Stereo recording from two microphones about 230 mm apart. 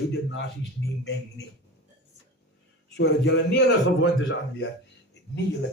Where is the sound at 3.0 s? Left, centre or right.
Left.